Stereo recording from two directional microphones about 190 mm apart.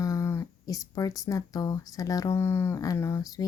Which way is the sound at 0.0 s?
15° left (ahead or behind).